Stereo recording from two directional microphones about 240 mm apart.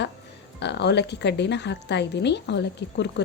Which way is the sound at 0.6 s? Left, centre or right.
Left.